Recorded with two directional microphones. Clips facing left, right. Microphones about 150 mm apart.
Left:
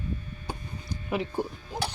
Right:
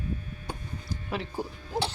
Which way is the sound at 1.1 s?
15° left (ahead or behind).